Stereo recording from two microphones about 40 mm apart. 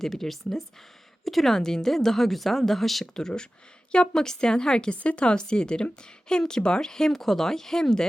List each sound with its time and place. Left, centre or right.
0.0 s a woman's voice: centre